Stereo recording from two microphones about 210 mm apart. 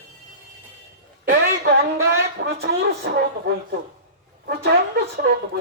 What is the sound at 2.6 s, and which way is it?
Speech, 50° right (ahead or behind).